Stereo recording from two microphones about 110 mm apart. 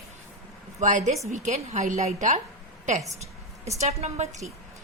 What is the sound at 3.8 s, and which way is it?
Speech, 90° right.